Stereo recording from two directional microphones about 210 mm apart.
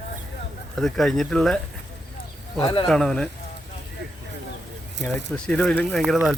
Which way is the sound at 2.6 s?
25° left (ahead or behind).